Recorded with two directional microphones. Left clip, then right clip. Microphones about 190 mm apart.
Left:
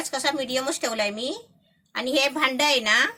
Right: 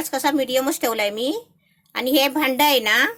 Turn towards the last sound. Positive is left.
turn(degrees=-45)  # may be behind; listen again after turning